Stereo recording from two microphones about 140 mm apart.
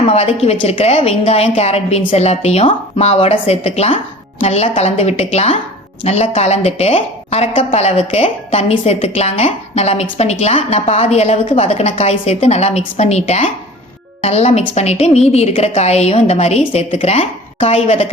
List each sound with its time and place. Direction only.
0.1 s a woman's voice: 50° left (ahead or behind)